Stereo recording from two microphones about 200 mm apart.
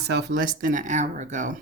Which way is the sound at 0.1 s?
55° right (ahead or behind).